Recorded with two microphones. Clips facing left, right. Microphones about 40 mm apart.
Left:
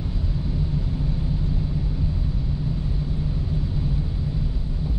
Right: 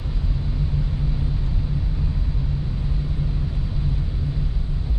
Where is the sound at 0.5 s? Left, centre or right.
Centre.